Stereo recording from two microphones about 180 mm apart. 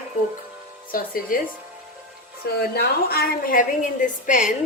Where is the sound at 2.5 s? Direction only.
60° left (ahead or behind).